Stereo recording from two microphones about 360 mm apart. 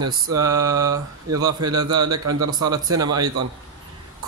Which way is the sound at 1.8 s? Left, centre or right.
Right.